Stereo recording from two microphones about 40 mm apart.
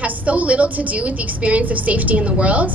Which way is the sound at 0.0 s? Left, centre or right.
Right.